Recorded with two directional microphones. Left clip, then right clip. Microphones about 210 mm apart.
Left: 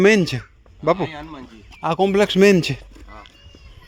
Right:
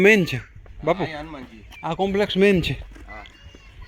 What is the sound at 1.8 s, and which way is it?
Speech, 40° left (ahead or behind).